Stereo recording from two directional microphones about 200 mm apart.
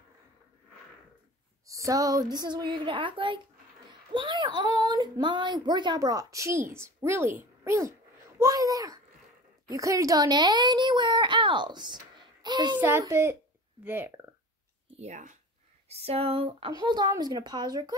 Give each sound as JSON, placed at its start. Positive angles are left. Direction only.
{"t": 1.7, "sound": "female singing", "side_deg": -15}
{"t": 2.7, "sound": "a woman's voice", "side_deg": -25}
{"t": 12.8, "sound": "a woman's voice", "side_deg": -10}
{"t": 14.9, "sound": "speech", "side_deg": -35}